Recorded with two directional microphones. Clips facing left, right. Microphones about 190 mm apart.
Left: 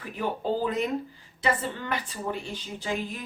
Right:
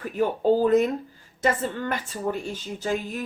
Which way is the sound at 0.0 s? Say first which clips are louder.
Right 7 dB; 45° right (ahead or behind).